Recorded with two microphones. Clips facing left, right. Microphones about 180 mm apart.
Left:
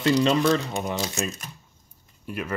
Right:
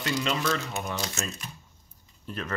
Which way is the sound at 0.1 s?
35° left (ahead or behind).